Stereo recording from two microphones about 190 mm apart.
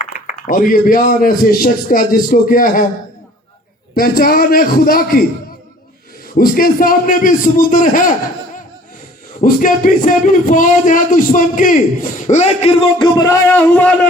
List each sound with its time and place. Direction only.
0.0 s speech: 40° left (ahead or behind)
3.9 s speech: 50° left (ahead or behind)
6.3 s speech: 45° left (ahead or behind)
9.4 s speech: 45° left (ahead or behind); by 13.3 s 20° left (ahead or behind)
13.5 s a man's voice: 5° left (ahead or behind)